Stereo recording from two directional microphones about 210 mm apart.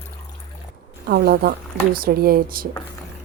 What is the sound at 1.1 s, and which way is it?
A woman's voice, 45° right (ahead or behind).